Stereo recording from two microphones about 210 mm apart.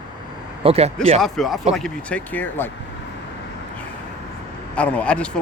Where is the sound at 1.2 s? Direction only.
Centre (ahead or behind).